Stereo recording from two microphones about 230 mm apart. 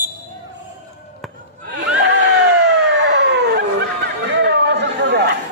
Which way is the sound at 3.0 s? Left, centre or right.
Right.